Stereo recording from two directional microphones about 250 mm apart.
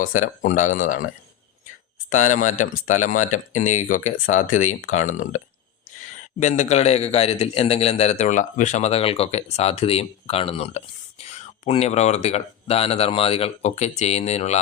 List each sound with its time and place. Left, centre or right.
0.2 s speech: left
2.0 s a man's voice: left
6.4 s a man's voice: left